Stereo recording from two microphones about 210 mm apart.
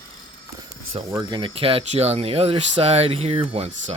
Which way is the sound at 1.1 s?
20° right (ahead or behind).